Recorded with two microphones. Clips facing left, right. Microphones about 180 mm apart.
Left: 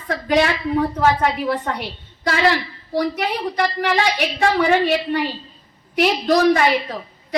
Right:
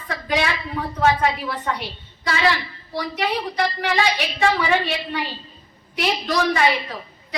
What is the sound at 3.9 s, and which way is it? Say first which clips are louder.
A woman's voice: left 2 dB; 55° left (ahead or behind).